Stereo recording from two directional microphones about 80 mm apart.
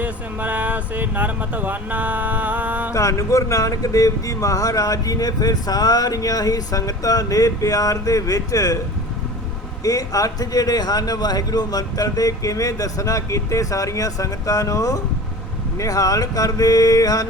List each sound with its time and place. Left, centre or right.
0.0 s speech: centre
2.9 s speech: left
9.8 s speech: left